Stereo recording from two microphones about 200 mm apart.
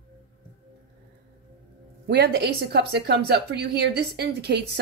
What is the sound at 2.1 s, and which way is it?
Speech, 55° right (ahead or behind).